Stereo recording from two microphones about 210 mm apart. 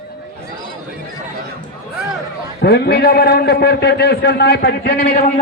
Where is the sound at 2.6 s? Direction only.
50° left (ahead or behind).